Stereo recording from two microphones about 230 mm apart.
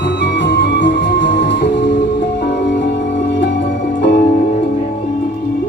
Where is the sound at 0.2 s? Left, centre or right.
Left.